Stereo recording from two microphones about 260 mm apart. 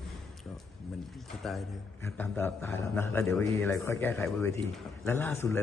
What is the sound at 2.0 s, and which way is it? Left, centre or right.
A man's voice, centre.